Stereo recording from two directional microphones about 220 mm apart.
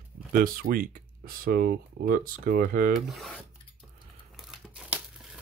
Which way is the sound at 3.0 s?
Centre (ahead or behind).